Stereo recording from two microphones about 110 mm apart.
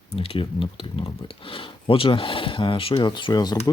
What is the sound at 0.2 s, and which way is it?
Speech, 55° left (ahead or behind).